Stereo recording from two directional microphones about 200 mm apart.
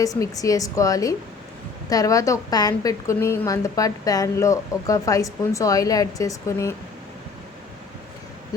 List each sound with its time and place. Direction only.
0.0 s a woman's voice: 15° left (ahead or behind)